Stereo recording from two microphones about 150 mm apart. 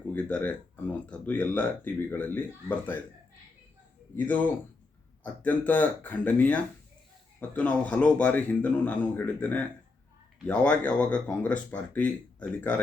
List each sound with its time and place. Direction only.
0.1 s speech: 10° left (ahead or behind)
4.3 s speech: 10° left (ahead or behind)